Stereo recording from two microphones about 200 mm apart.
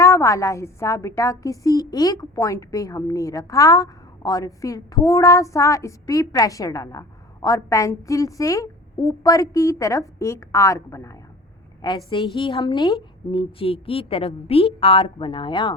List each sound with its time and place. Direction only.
0.0 s a woman's voice: 15° left (ahead or behind)